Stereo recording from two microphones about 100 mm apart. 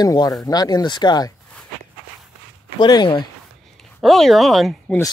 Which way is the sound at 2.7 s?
50° left (ahead or behind).